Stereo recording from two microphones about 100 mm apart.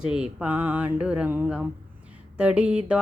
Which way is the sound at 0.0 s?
10° right (ahead or behind).